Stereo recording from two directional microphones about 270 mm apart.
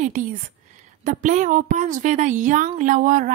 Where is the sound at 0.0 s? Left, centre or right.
Right.